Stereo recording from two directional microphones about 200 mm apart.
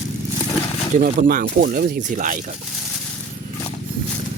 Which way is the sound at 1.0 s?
45° right (ahead or behind).